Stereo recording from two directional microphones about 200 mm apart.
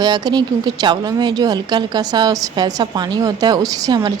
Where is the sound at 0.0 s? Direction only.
20° right (ahead or behind).